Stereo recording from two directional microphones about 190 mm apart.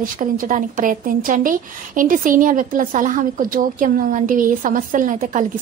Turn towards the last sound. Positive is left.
turn(degrees=-45)  # may be behind; listen again after turning